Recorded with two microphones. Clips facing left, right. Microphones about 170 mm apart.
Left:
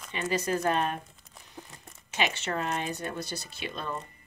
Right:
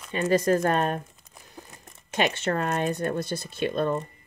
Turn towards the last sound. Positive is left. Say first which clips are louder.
# right 12 dB
turn(degrees=-50)  # may be behind; listen again after turning